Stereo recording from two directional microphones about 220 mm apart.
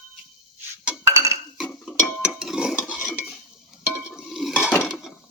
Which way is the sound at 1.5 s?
5° left (ahead or behind).